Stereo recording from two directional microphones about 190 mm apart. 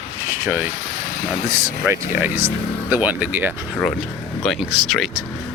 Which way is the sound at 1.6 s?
10° right (ahead or behind).